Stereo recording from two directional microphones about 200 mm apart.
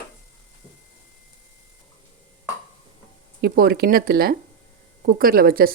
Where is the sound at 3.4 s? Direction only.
50° right (ahead or behind).